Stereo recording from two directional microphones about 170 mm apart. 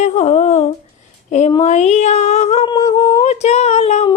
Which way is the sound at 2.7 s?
25° left (ahead or behind).